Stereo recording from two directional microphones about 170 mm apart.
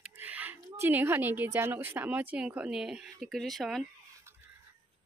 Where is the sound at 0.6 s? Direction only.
15° right (ahead or behind); by 3.8 s centre (ahead or behind).